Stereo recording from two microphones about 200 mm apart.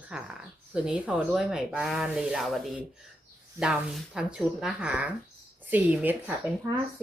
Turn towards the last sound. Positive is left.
turn(degrees=-10)  # may be behind; listen again after turning